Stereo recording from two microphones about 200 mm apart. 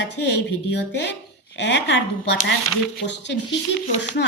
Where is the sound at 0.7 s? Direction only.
60° left (ahead or behind).